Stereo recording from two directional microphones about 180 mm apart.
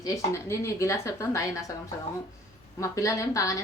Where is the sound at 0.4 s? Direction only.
15° left (ahead or behind).